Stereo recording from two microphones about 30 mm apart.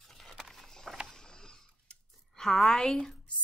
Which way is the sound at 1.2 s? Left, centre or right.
Left.